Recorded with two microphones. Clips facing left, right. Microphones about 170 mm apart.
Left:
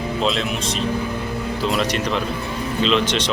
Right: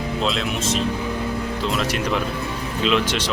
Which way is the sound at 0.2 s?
Centre (ahead or behind).